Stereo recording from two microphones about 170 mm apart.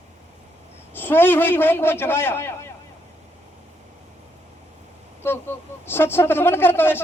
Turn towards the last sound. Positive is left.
turn(degrees=15)  # may be behind; listen again after turning